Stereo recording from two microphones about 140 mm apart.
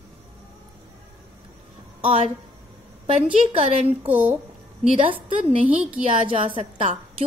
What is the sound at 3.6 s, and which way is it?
Speech, 45° right (ahead or behind).